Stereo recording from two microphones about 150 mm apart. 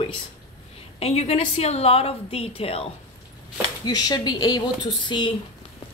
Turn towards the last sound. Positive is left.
turn(degrees=30)  # may be behind; listen again after turning